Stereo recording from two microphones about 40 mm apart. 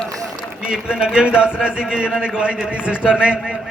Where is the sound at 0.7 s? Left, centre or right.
Centre.